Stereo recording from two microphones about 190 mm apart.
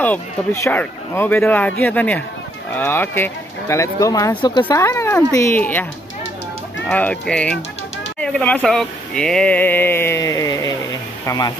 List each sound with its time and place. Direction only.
0.0 s speech: 10° left (ahead or behind)
6.9 s speech: 5° left (ahead or behind)